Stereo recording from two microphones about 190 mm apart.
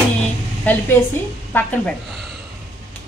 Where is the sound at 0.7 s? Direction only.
10° left (ahead or behind).